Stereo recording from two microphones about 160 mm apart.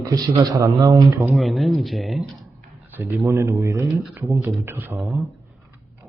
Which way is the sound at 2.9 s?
15° right (ahead or behind).